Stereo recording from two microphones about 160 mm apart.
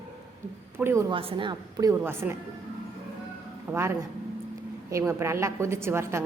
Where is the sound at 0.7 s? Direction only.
15° right (ahead or behind).